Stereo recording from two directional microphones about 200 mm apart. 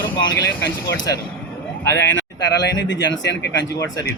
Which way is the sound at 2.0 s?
60° left (ahead or behind).